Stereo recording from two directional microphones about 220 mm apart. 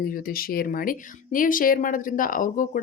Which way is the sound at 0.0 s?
40° left (ahead or behind).